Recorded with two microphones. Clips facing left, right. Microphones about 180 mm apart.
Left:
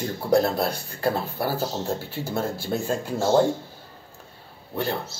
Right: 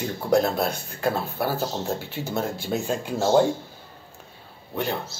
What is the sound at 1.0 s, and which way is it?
A man's voice, 15° right (ahead or behind).